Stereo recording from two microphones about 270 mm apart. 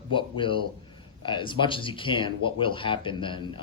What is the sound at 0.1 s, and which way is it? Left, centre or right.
Speech, centre.